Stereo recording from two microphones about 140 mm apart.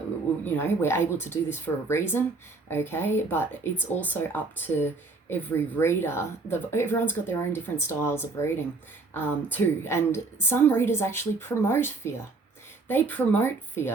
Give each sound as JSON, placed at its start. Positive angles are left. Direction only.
{"t": 0.4, "sound": "speech", "side_deg": 15}